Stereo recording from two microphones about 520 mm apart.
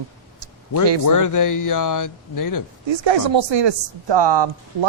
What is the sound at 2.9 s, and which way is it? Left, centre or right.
Speech, right.